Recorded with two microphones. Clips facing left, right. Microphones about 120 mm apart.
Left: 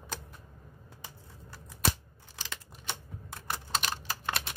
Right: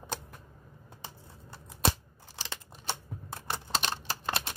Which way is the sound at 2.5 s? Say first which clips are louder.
Right 3 dB; 30° right (ahead or behind).